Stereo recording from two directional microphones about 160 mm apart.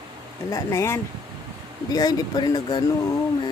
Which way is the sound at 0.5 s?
20° left (ahead or behind).